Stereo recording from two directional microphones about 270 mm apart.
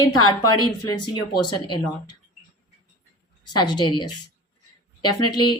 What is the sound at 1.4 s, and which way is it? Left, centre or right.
Speech, centre.